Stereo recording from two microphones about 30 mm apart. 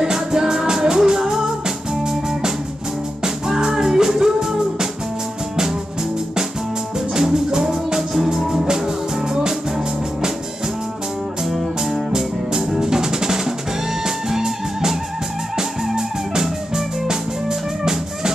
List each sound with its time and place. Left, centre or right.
0.0 s music: right
3.4 s music: centre
7.2 s music: centre
11.5 s music: centre